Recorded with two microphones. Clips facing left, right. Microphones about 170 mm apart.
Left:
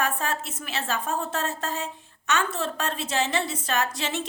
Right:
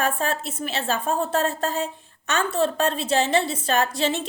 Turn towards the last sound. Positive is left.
turn(degrees=-30)  # may be behind; listen again after turning